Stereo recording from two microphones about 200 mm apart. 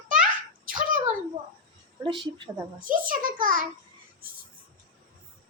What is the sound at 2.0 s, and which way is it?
Speech, 25° right (ahead or behind).